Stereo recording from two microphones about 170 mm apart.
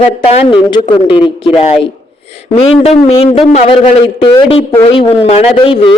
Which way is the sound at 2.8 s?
35° left (ahead or behind).